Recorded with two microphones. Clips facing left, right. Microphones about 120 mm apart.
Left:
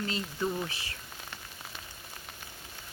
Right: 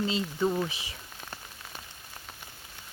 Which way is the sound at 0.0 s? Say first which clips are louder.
Right 5 dB; 25° right (ahead or behind).